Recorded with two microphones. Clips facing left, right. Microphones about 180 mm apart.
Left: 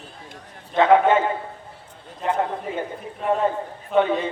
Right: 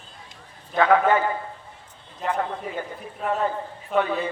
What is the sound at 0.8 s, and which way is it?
Speech, 25° left (ahead or behind).